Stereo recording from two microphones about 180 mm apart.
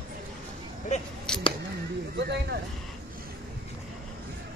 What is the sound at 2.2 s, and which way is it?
Speech, 70° right (ahead or behind).